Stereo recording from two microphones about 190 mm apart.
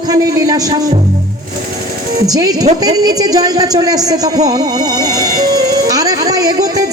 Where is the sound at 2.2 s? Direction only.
20° right (ahead or behind).